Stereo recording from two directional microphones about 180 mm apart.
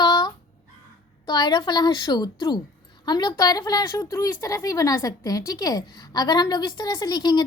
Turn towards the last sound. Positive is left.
turn(degrees=20)  # may be behind; listen again after turning